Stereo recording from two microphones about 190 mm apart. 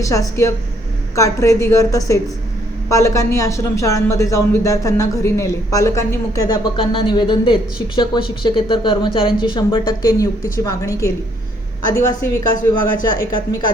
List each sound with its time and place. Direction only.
0.1 s speech: 15° left (ahead or behind)